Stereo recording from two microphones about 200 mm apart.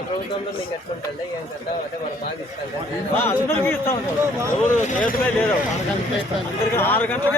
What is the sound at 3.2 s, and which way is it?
Speech, 10° left (ahead or behind).